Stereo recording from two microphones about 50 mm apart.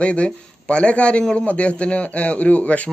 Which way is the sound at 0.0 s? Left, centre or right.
Left.